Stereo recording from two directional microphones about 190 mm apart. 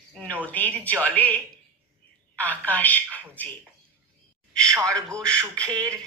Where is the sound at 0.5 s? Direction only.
5° left (ahead or behind).